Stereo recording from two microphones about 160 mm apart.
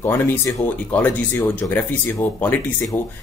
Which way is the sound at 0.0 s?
15° left (ahead or behind).